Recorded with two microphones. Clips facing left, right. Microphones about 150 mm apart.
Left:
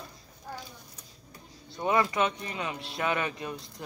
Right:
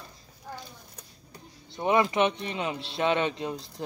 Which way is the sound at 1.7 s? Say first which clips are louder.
Right 3 dB; 20° right (ahead or behind).